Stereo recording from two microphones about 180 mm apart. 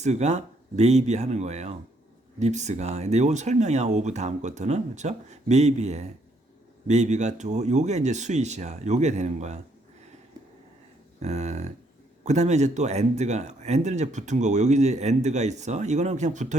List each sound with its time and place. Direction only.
0.0 s speech: 40° right (ahead or behind)
11.2 s speech: 40° right (ahead or behind)